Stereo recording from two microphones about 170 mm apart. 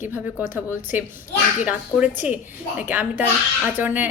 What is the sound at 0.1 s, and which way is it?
A woman's voice, 10° right (ahead or behind).